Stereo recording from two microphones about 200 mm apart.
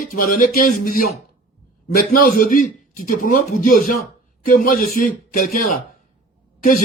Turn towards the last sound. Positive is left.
turn(degrees=45)  # may be behind; listen again after turning